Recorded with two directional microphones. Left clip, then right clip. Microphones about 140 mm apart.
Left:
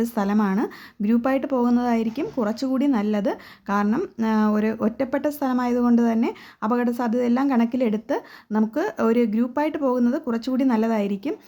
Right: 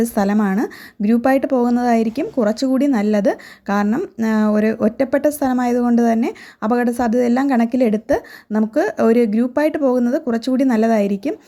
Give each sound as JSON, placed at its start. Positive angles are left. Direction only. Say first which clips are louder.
{"t": 0.0, "sound": "a woman's voice", "louder": "right 5 dB", "side_deg": -30}
{"t": 3.8, "sound": "speech", "louder": "right 4 dB", "side_deg": -15}
{"t": 4.2, "sound": "a woman's voice", "louder": "right 6 dB", "side_deg": -30}